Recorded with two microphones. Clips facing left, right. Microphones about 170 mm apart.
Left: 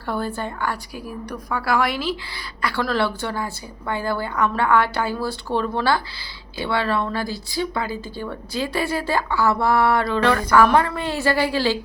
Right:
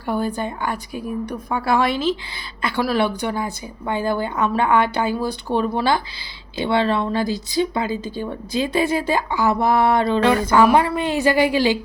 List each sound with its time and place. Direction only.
0.0 s a woman's voice: 15° right (ahead or behind)